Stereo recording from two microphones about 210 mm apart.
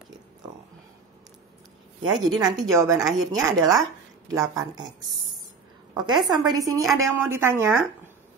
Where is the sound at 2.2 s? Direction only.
20° right (ahead or behind).